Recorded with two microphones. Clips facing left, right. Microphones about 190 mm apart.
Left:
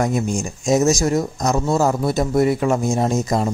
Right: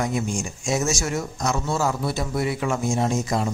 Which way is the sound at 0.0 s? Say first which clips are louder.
Left 5 dB; 40° left (ahead or behind).